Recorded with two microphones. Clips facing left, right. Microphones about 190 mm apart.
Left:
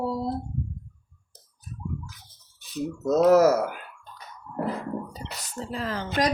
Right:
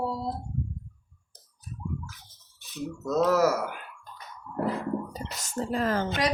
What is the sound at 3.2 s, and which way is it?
Speech, 45° left (ahead or behind).